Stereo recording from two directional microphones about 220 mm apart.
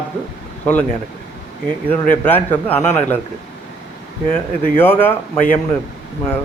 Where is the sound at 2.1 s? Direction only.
10° left (ahead or behind).